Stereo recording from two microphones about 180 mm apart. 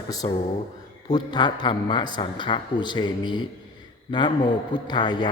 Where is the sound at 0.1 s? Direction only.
20° left (ahead or behind).